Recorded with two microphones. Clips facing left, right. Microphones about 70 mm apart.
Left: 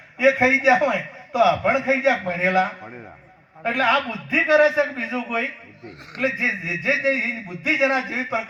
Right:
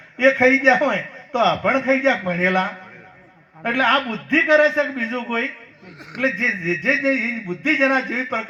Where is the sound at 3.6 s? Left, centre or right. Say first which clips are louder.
Right 2 dB; centre.